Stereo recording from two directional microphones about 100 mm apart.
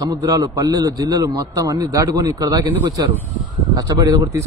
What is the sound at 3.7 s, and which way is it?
Speech, 40° right (ahead or behind).